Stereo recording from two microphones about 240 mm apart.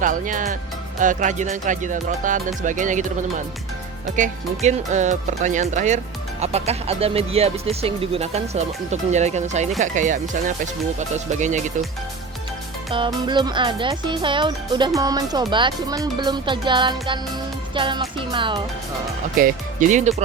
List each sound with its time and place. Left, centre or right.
0.0 s speech: right
12.9 s speech: centre
19.4 s speech: right